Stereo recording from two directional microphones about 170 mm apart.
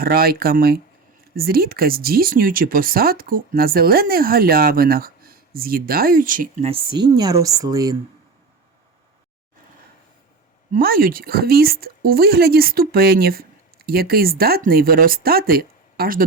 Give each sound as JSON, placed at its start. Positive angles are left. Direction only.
{"t": 0.0, "sound": "speech", "side_deg": -60}
{"t": 6.7, "sound": "speech", "side_deg": -30}
{"t": 10.7, "sound": "speech", "side_deg": -60}